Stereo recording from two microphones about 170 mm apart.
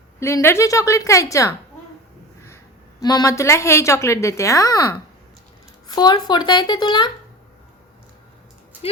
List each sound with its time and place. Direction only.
0.2 s a woman's voice: 15° left (ahead or behind)
3.0 s a woman's voice: 25° left (ahead or behind)
8.8 s speech: 35° left (ahead or behind)